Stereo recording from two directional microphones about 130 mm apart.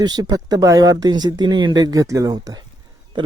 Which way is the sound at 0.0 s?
35° right (ahead or behind).